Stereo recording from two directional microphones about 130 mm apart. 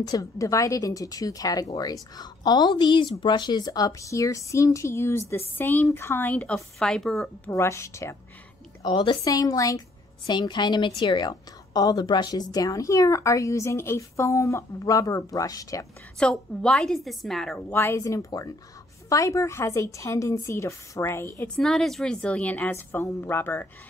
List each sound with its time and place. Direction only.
0.0 s a woman's voice: 30° left (ahead or behind); by 7.2 s 5° left (ahead or behind)
7.4 s a woman's voice: 20° left (ahead or behind)
8.8 s a woman's voice: 40° left (ahead or behind)
9.2 s a woman's voice: 30° left (ahead or behind)
16.2 s a woman's voice: 5° left (ahead or behind)
17.6 s a woman's voice: 15° left (ahead or behind)
21.5 s a woman's voice: 5° left (ahead or behind)